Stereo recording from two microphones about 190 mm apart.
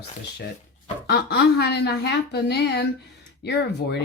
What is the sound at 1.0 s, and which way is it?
A woman's voice, 60° left (ahead or behind).